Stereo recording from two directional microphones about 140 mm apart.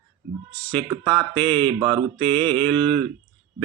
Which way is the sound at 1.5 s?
35° right (ahead or behind).